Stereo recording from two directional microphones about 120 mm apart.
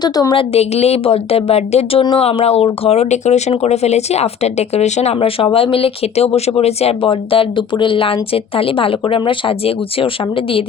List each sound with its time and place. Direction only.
0.0 s a woman's voice: 35° left (ahead or behind)
0.5 s speech: 60° left (ahead or behind)